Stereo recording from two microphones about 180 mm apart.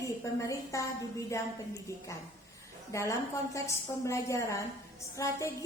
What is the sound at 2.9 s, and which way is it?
A woman's voice, 15° left (ahead or behind).